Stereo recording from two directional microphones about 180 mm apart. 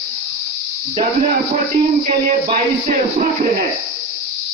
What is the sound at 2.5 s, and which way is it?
Speech, 50° right (ahead or behind).